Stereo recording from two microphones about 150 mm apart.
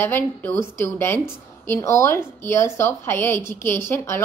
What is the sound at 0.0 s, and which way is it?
A woman's voice, 15° left (ahead or behind).